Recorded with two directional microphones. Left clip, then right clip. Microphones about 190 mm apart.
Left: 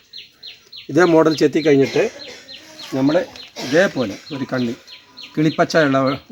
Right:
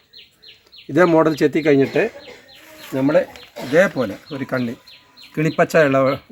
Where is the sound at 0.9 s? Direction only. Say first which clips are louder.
Left 1 dB; 15° right (ahead or behind); by 5.9 s 30° right (ahead or behind).